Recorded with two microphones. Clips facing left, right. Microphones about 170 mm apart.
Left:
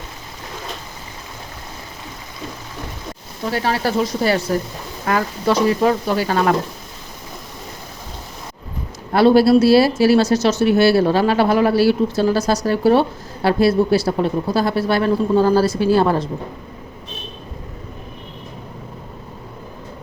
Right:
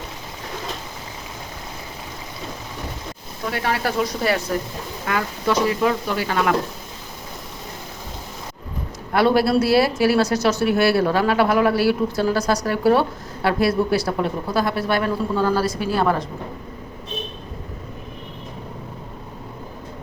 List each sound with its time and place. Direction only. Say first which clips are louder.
3.5 s speech: left 4 dB; 35° left (ahead or behind)
9.1 s speech: left 5 dB; 30° left (ahead or behind)